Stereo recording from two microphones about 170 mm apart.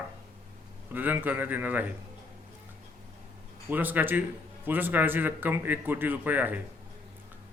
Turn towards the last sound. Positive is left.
turn(degrees=-10)  # may be behind; listen again after turning